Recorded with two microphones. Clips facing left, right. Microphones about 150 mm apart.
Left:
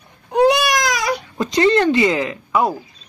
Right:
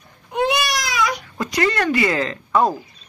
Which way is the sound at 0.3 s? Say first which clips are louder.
Left 6 dB; 45° left (ahead or behind).